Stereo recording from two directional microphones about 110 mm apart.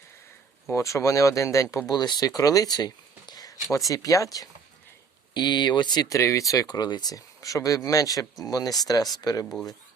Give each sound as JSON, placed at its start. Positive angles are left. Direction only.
{"t": 0.7, "sound": "speech", "side_deg": 25}
{"t": 1.9, "sound": "speech", "side_deg": 40}
{"t": 5.3, "sound": "speech", "side_deg": 45}